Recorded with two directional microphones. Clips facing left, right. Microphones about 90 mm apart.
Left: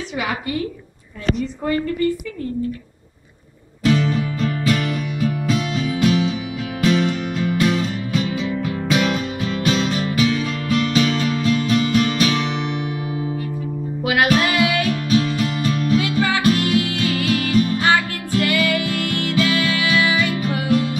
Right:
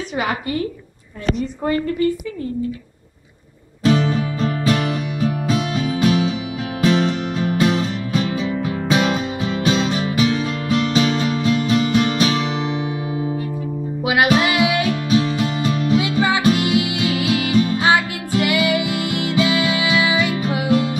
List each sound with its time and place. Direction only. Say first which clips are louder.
0.1 s a woman's voice: right 2 dB; 40° right (ahead or behind)
3.8 s music: right 1 dB; 35° right (ahead or behind)
14.0 s music: right 1 dB; 20° right (ahead or behind)